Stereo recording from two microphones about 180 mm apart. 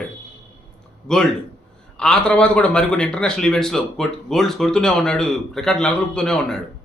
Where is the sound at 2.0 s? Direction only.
5° left (ahead or behind).